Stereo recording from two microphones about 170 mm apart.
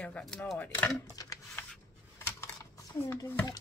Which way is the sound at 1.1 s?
20° left (ahead or behind).